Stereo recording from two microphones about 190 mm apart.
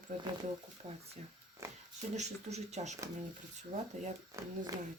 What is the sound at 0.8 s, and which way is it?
Speech, 35° right (ahead or behind).